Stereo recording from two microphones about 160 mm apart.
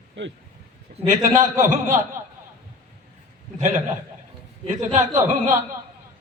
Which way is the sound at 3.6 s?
50° right (ahead or behind).